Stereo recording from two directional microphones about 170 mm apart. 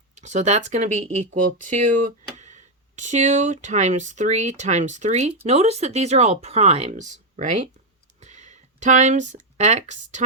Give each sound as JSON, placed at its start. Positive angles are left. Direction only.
{"t": 0.2, "sound": "speech", "side_deg": -45}